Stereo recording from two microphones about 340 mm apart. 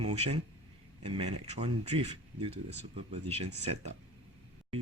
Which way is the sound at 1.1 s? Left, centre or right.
Centre.